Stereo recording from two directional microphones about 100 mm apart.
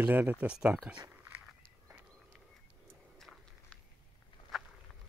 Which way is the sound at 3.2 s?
5° left (ahead or behind).